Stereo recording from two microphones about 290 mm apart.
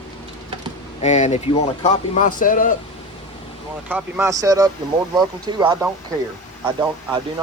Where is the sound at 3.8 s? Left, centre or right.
Centre.